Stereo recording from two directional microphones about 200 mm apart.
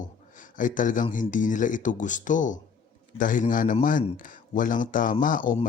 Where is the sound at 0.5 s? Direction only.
40° left (ahead or behind).